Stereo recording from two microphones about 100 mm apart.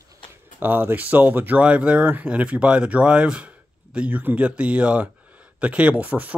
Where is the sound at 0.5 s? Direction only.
20° right (ahead or behind).